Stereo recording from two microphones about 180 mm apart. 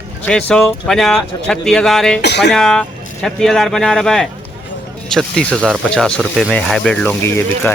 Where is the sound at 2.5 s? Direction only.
5° left (ahead or behind).